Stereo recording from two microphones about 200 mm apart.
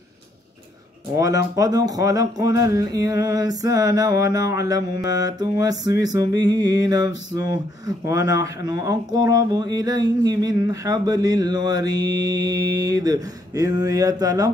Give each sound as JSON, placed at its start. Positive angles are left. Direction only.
{"t": 1.1, "sound": "speech", "side_deg": -15}
{"t": 5.0, "sound": "music", "side_deg": -20}